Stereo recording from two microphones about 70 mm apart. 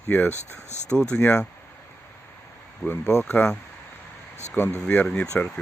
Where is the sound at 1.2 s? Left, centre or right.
Left.